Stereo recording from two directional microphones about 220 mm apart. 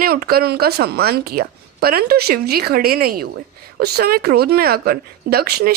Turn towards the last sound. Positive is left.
turn(degrees=-45)  # may be behind; listen again after turning